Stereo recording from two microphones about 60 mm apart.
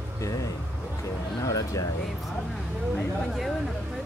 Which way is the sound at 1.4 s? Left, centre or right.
Left.